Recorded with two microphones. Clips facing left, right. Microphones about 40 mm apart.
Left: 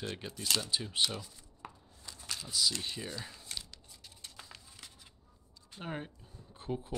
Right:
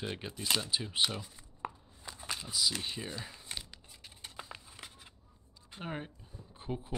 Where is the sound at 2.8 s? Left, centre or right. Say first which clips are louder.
Right 1 dB; centre.